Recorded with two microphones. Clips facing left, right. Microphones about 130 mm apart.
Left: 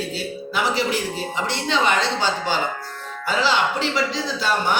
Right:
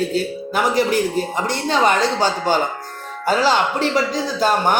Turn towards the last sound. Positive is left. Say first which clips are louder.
# right 4 dB
turn(degrees=-45)  # may be behind; listen again after turning